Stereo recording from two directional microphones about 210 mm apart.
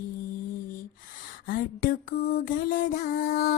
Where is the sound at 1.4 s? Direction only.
40° left (ahead or behind).